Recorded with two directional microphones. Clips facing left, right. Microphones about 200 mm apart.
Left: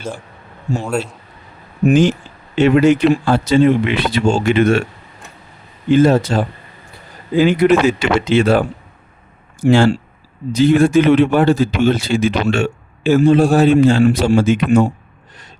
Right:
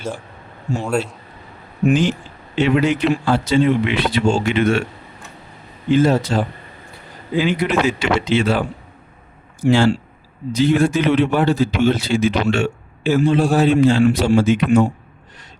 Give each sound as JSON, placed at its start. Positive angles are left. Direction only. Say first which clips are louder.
{"t": 0.8, "sound": "a man's voice", "louder": "right 1 dB", "side_deg": 0}
{"t": 2.6, "sound": "a man's voice", "louder": "left 5 dB", "side_deg": 45}
{"t": 6.0, "sound": "a man's voice", "louder": "left 4 dB", "side_deg": 50}
{"t": 9.6, "sound": "a man's voice", "louder": "left 3 dB", "side_deg": 50}